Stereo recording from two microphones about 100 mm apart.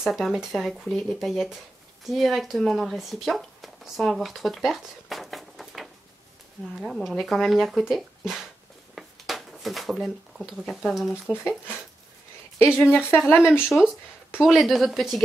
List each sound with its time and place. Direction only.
0.0 s speech: 5° right (ahead or behind)
8.9 s a sound: centre (ahead or behind)
10.7 s speech: centre (ahead or behind)
12.7 s speech: 20° left (ahead or behind)
13.7 s speech: 5° right (ahead or behind)